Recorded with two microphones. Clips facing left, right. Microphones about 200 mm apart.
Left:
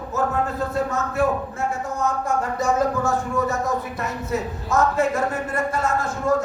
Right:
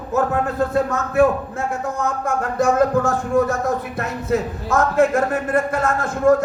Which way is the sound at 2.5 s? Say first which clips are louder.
Right 7 dB; 50° right (ahead or behind).